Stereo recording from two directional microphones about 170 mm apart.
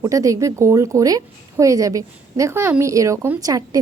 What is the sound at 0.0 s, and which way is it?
A woman's voice, 20° right (ahead or behind).